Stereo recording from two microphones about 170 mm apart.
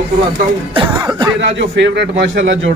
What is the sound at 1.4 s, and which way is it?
A man's voice, 90° right.